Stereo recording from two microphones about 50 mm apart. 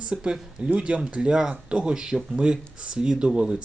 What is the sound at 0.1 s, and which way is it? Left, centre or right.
Speech, centre.